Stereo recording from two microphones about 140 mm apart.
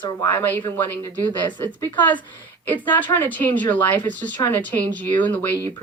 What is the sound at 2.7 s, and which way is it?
Speech, 10° left (ahead or behind).